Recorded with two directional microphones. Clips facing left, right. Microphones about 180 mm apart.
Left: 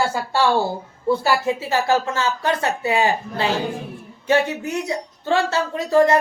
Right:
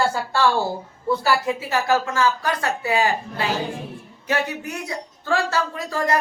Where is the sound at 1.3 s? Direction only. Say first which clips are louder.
Left 2 dB; 25° left (ahead or behind).